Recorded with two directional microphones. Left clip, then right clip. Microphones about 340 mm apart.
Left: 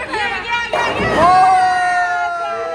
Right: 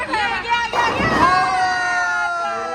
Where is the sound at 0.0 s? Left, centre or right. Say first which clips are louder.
Even; right.